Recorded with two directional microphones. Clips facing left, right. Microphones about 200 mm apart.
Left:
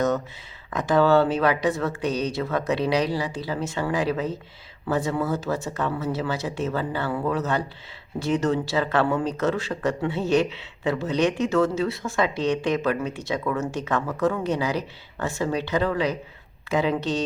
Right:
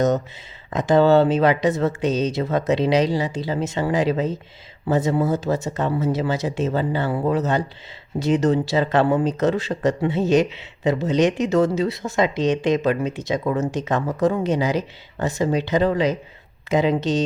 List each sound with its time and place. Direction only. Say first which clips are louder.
0.7 s speech: right 4 dB; 20° right (ahead or behind)